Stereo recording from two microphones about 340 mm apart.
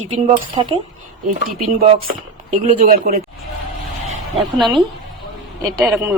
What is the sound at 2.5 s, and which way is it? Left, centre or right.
Speech, right.